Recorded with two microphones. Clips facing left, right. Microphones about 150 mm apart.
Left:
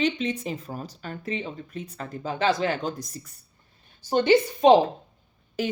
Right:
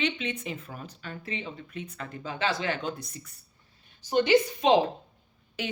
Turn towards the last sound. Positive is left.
turn(degrees=45)  # may be behind; listen again after turning